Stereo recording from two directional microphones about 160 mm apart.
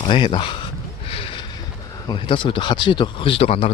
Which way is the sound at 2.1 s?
30° left (ahead or behind).